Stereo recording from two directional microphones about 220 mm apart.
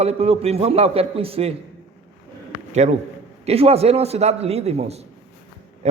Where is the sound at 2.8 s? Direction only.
30° right (ahead or behind).